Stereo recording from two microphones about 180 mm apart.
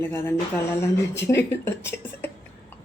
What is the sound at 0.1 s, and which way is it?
A woman's voice, 15° left (ahead or behind).